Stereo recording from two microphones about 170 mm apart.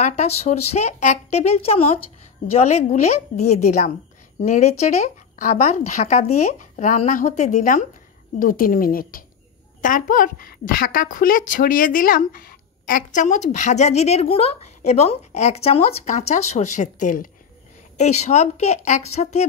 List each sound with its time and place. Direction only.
0.0 s speech: 40° left (ahead or behind)